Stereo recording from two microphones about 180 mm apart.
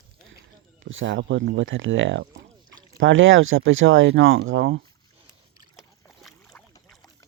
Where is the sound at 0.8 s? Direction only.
90° right.